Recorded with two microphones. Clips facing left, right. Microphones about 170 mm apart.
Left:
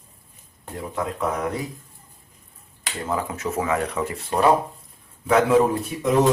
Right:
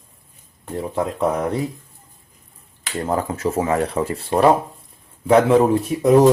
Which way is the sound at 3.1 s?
35° right (ahead or behind).